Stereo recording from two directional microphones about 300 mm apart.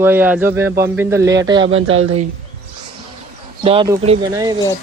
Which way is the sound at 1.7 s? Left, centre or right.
Right.